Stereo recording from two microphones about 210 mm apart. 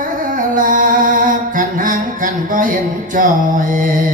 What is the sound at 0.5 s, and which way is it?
Mantra, 40° right (ahead or behind).